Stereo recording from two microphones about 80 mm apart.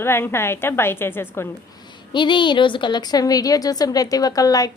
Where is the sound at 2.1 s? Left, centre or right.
Left.